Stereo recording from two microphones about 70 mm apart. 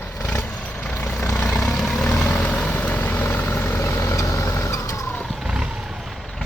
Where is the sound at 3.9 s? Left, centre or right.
Left.